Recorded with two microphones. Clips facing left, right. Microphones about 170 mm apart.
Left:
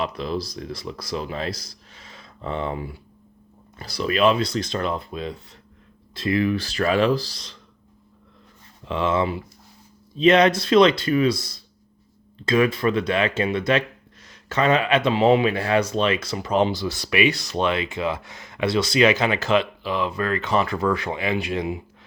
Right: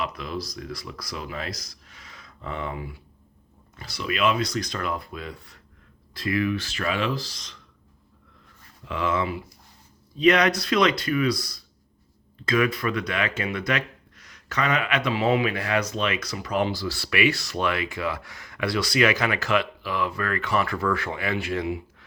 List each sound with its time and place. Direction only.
0.0 s speech: 30° left (ahead or behind)
8.8 s speech: 25° left (ahead or behind)